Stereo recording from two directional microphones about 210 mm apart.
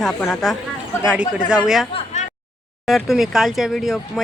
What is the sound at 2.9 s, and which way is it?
Speech, centre (ahead or behind).